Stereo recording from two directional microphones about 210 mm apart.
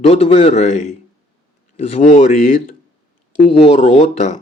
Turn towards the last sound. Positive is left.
turn(degrees=35)  # may be behind; listen again after turning